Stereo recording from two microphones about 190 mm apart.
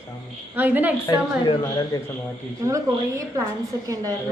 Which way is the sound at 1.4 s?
20° left (ahead or behind).